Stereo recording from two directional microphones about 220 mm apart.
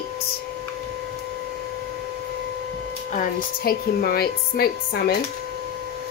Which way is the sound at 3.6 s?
45° left (ahead or behind).